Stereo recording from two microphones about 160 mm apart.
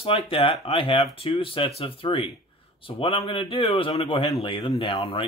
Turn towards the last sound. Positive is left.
turn(degrees=35)  # may be behind; listen again after turning